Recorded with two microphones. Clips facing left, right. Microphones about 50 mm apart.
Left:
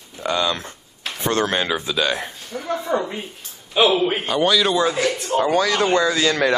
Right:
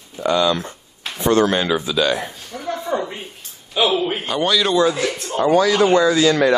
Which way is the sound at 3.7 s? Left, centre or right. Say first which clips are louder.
Left 1 dB; left.